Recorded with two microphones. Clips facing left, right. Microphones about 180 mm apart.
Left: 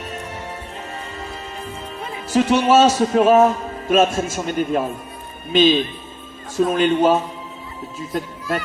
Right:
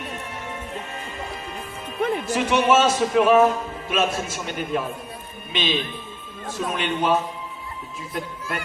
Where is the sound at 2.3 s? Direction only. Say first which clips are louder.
Left 6 dB; 35° left (ahead or behind).